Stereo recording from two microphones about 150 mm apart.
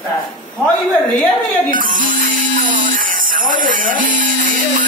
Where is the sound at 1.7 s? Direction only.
65° right (ahead or behind).